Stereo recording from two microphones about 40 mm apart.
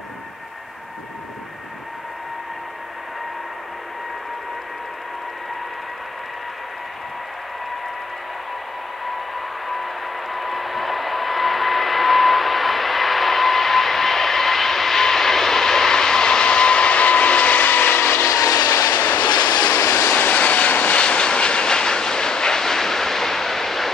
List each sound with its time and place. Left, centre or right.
9.7 s vehicle: centre; by 19.2 s left
19.7 s vehicle: left
20.2 s vehicle: left
21.0 s vehicle: left; by 23.9 s centre